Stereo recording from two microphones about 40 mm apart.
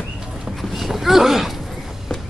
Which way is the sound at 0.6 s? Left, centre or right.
Centre.